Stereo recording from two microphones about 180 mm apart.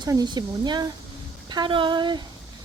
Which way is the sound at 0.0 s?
20° right (ahead or behind).